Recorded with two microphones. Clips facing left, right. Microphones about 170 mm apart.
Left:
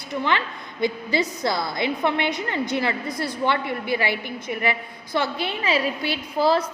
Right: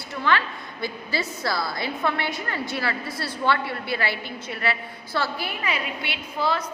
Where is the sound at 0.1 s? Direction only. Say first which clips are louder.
Even; 20° left (ahead or behind).